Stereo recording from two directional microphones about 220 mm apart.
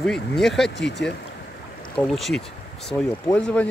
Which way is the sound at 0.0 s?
Centre (ahead or behind).